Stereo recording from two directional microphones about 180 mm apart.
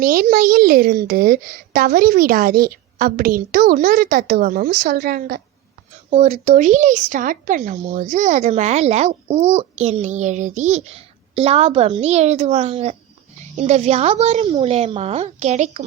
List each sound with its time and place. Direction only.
0.0 s a woman's voice: 55° right (ahead or behind)
6.1 s speech: 35° right (ahead or behind)